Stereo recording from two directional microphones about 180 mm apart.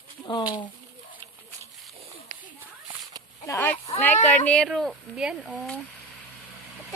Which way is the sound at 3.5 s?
10° left (ahead or behind).